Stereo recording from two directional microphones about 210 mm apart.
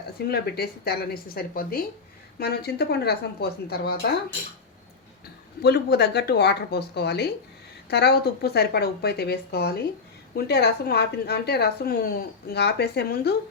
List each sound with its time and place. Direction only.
0.3 s a woman's voice: 50° left (ahead or behind)
5.6 s a woman's voice: 50° left (ahead or behind)